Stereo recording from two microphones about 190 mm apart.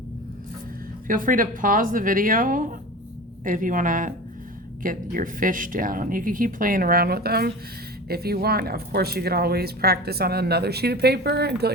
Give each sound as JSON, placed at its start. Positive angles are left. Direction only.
{"t": 1.0, "sound": "speech", "side_deg": -45}